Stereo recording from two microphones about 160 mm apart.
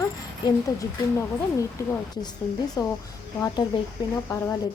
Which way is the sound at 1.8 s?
15° left (ahead or behind).